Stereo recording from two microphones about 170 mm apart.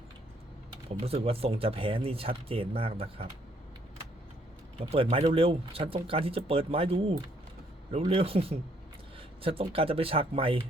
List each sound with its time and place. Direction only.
0.9 s speech: 35° right (ahead or behind)
4.8 s speech: 35° right (ahead or behind)